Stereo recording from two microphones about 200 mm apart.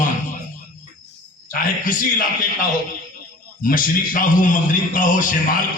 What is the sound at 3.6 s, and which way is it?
Speech, 45° left (ahead or behind).